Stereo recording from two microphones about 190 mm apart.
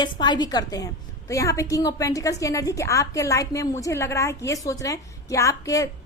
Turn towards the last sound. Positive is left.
turn(degrees=15)  # may be behind; listen again after turning